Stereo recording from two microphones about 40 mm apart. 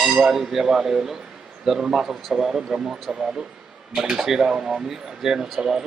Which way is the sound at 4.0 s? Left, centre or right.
Centre.